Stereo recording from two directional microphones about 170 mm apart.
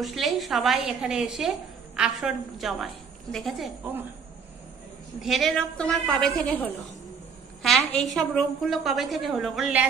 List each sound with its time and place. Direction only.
0.0 s a woman's voice: centre (ahead or behind)
5.2 s a woman's voice: centre (ahead or behind)